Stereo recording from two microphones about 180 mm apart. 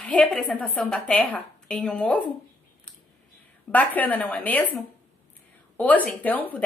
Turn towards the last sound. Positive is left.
turn(degrees=10)  # may be behind; listen again after turning